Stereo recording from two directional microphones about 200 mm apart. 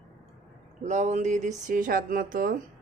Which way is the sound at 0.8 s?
35° right (ahead or behind).